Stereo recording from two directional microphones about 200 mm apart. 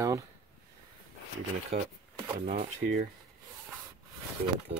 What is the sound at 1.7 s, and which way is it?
Speech, 35° right (ahead or behind).